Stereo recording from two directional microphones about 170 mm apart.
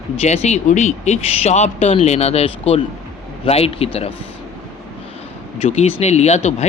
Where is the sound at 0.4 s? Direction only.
40° left (ahead or behind).